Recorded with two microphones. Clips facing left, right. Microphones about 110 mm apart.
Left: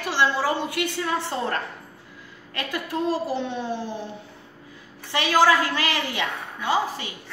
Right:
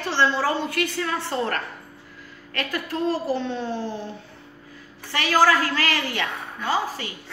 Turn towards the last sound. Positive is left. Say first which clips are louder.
# left 1 dB
turn(degrees=20)  # may be behind; listen again after turning